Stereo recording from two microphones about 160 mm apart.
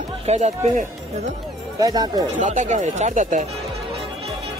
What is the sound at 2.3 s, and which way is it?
Speech, 50° right (ahead or behind).